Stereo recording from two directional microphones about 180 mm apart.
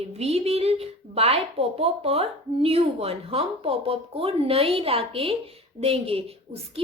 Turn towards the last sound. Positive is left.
turn(degrees=-35)  # may be behind; listen again after turning